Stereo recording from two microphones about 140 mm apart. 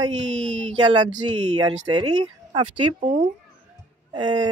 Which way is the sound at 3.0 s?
65° right (ahead or behind).